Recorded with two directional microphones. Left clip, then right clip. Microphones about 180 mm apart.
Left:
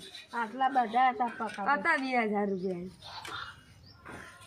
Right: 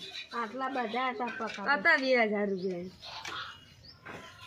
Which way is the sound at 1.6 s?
50° left (ahead or behind).